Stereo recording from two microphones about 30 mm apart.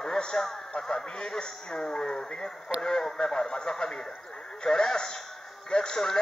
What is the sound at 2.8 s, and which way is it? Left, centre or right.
Speech, centre.